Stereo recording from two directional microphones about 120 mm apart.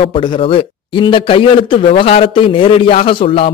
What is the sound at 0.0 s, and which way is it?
A man's voice, 45° left (ahead or behind).